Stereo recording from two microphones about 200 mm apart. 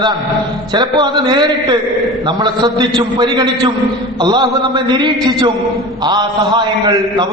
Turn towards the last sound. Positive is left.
turn(degrees=-20)  # may be behind; listen again after turning